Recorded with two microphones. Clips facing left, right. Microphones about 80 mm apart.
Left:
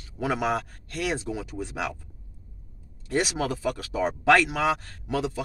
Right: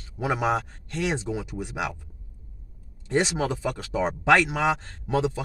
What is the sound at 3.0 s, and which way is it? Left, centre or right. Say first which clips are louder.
Speech: right 2 dB; right.